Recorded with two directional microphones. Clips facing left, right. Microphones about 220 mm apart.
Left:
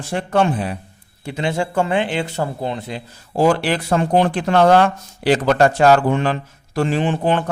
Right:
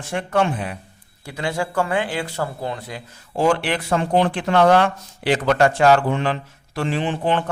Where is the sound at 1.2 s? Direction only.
25° left (ahead or behind).